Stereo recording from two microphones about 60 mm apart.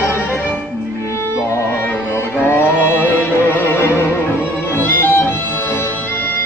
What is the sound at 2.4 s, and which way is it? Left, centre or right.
Music, left.